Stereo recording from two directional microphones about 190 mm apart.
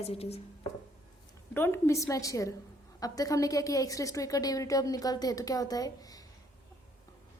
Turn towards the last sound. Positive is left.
turn(degrees=20)  # may be behind; listen again after turning